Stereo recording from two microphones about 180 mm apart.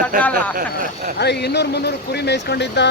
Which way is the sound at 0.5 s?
45° right (ahead or behind).